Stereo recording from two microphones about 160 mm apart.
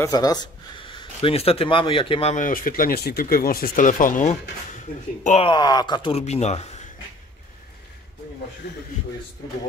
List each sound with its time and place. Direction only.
0.0 s speech: 25° left (ahead or behind)
2.3 s speech: 60° left (ahead or behind)
5.5 s speech: 25° left (ahead or behind); by 6.7 s 40° left (ahead or behind)
8.6 s a man's voice: 90° left